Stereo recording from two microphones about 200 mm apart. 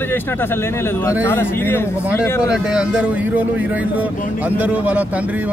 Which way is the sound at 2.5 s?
5° right (ahead or behind).